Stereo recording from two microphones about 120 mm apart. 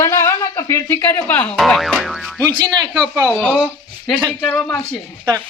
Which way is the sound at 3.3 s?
10° left (ahead or behind).